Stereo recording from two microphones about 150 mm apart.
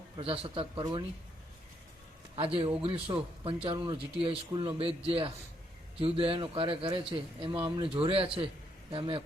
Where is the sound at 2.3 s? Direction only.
35° right (ahead or behind).